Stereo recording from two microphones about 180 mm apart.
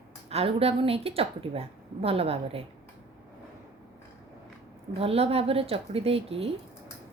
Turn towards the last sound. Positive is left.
turn(degrees=-30)  # may be behind; listen again after turning